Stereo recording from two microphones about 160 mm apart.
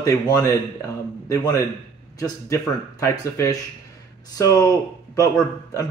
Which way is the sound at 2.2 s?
20° left (ahead or behind).